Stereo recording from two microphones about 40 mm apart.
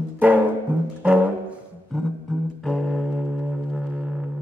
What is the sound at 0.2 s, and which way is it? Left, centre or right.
Music, right.